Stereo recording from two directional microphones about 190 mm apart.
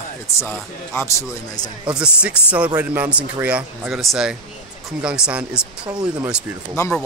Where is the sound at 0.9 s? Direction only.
20° left (ahead or behind).